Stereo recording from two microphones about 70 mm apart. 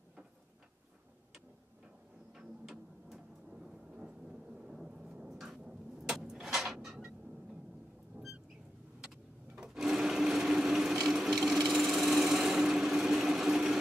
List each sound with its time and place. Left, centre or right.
2.6 s a sound: centre
8.2 s rodents: right
9.6 s sewing machine: centre